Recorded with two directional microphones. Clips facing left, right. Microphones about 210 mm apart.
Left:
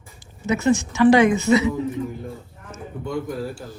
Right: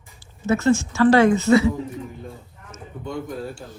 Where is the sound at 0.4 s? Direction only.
15° left (ahead or behind).